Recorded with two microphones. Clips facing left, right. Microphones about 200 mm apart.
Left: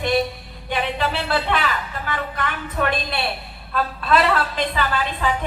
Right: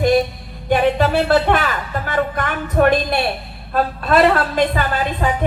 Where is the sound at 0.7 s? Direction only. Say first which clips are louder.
Right 8 dB; 45° right (ahead or behind).